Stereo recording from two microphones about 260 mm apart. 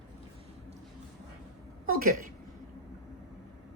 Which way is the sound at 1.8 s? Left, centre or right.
Right.